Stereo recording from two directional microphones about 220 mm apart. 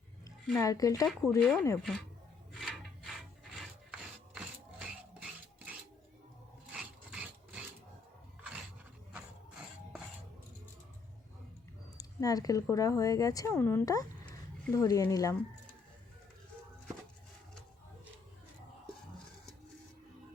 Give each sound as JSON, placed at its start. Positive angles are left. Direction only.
{"t": 0.6, "sound": "speech", "side_deg": 15}
{"t": 1.4, "sound": "speech", "side_deg": 0}
{"t": 2.5, "sound": "rub", "side_deg": 0}
{"t": 6.7, "sound": "wood", "side_deg": -5}
{"t": 11.9, "sound": "speech", "side_deg": 15}